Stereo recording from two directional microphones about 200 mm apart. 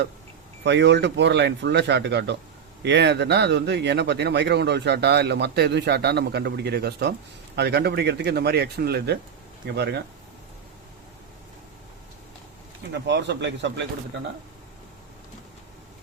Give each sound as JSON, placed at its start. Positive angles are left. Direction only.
{"t": 0.6, "sound": "speech", "side_deg": -60}
{"t": 12.9, "sound": "speech", "side_deg": -60}